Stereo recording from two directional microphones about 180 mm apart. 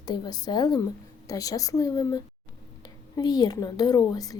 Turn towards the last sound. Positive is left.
turn(degrees=20)  # may be behind; listen again after turning